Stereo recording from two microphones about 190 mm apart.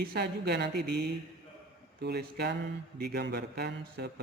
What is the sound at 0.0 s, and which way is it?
Speech, 55° right (ahead or behind).